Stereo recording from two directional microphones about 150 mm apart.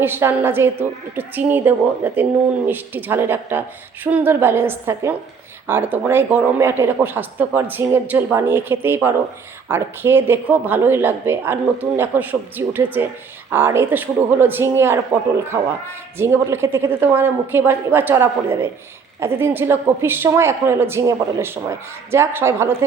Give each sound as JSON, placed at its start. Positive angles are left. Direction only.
{"t": 0.0, "sound": "speech", "side_deg": -15}